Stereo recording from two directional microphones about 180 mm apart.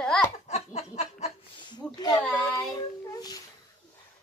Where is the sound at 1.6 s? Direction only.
25° left (ahead or behind).